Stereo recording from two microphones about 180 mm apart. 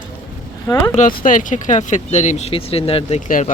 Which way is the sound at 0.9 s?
50° left (ahead or behind).